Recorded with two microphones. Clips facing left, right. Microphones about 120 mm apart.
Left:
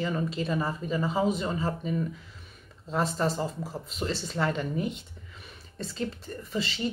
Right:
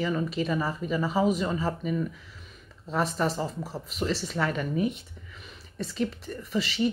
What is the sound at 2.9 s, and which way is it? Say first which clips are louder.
Speech: right 1 dB; 25° left (ahead or behind).